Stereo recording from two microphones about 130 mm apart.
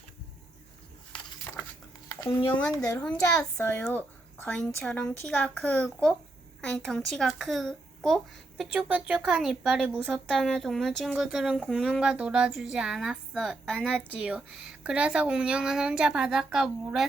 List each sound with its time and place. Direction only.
2.0 s a child's voice: 20° left (ahead or behind)
3.6 s a child's voice: 15° left (ahead or behind); by 17.1 s 5° right (ahead or behind)